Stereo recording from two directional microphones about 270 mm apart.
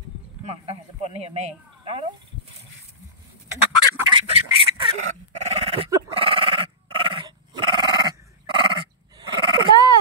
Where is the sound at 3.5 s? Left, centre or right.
Centre.